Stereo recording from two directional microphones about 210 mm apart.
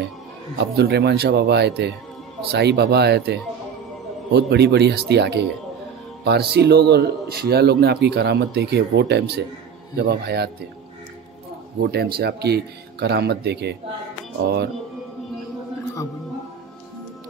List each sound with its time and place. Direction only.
0.6 s speech: 50° right (ahead or behind)
6.5 s speech: 50° right (ahead or behind)
11.8 s speech: 50° right (ahead or behind)